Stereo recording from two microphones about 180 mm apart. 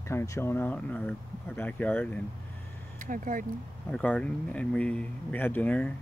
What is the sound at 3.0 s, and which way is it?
Speech, 50° right (ahead or behind).